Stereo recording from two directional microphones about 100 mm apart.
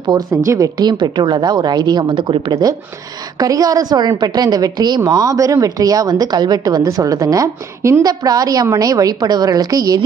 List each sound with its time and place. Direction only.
0.3 s a woman's voice: 30° right (ahead or behind); by 2.4 s 55° right (ahead or behind)
3.3 s speech: 40° right (ahead or behind)